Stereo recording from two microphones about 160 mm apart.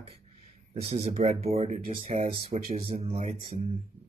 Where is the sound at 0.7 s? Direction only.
40° right (ahead or behind).